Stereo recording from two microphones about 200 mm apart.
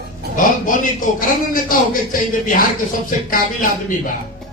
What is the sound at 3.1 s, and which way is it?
Speech, 45° left (ahead or behind).